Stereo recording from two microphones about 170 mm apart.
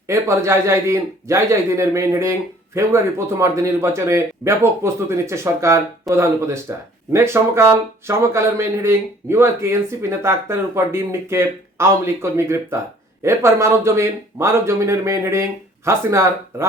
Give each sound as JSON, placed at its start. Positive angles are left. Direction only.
{"t": 0.1, "sound": "a man's voice", "side_deg": -15}